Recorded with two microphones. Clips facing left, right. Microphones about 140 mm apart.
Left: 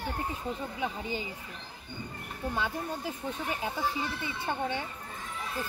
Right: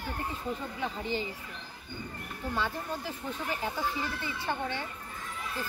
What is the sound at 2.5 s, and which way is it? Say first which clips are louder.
Speech: right 1 dB; 15° left (ahead or behind).